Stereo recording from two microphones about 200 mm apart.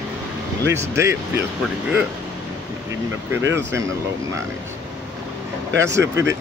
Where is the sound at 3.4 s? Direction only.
15° right (ahead or behind).